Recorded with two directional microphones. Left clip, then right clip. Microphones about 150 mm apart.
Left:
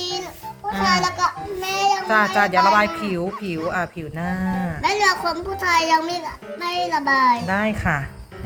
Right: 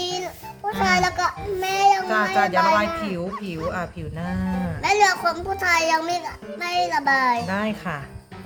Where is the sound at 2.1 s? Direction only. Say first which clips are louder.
Left 3 dB; 20° left (ahead or behind); by 4.7 s 5° left (ahead or behind).